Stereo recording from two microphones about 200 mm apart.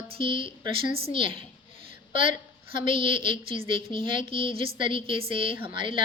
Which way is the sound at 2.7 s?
25° right (ahead or behind).